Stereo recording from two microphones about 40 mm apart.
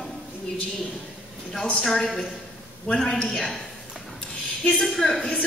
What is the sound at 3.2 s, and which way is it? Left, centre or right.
Speech, centre.